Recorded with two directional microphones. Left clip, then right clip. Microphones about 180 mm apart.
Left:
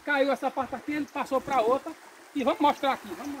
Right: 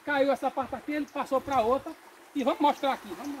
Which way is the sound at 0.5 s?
50° left (ahead or behind).